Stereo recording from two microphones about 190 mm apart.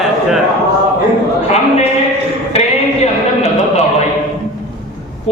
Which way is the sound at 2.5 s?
35° left (ahead or behind).